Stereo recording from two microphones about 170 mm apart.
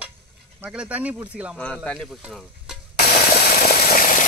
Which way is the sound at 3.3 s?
60° left (ahead or behind).